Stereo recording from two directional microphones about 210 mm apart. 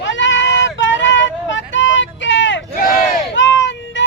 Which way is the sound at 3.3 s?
60° left (ahead or behind).